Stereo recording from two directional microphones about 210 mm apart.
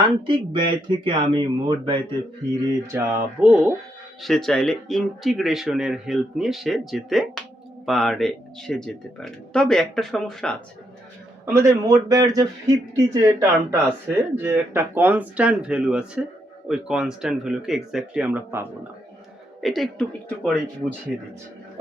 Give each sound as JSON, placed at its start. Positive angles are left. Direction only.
{"t": 0.3, "sound": "speech", "side_deg": -20}
{"t": 2.8, "sound": "a man's voice", "side_deg": -10}
{"t": 11.4, "sound": "a man's voice", "side_deg": -15}
{"t": 19.6, "sound": "speech", "side_deg": 0}